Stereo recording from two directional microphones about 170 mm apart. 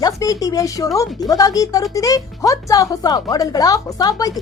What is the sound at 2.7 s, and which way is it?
A woman's voice, 20° left (ahead or behind).